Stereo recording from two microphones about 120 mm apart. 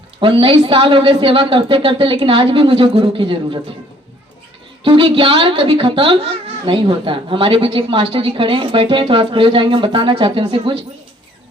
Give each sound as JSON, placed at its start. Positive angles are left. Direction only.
{"t": 0.2, "sound": "a woman's voice", "side_deg": -45}
{"t": 4.8, "sound": "a woman's voice", "side_deg": -45}